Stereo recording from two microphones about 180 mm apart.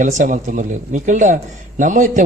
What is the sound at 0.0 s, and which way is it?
A man's voice, 45° right (ahead or behind).